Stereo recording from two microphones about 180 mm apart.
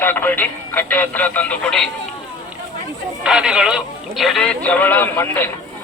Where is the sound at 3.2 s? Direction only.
5° right (ahead or behind).